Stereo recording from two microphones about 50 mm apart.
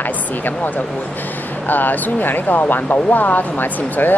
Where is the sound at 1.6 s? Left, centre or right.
Left.